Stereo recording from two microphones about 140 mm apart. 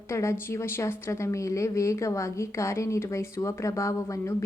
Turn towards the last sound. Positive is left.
turn(degrees=20)  # may be behind; listen again after turning